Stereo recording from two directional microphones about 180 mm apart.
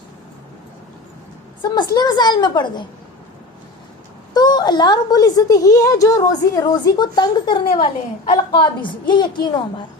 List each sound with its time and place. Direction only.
1.6 s a woman's voice: 25° left (ahead or behind)
4.4 s a woman's voice: 25° left (ahead or behind)